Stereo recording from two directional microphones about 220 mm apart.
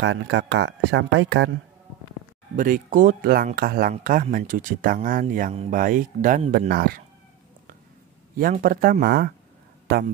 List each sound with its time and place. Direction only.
0.0 s speech: 55° right (ahead or behind)
2.5 s speech: 35° right (ahead or behind)
6.7 s speech: 45° right (ahead or behind)
8.4 s speech: 40° right (ahead or behind)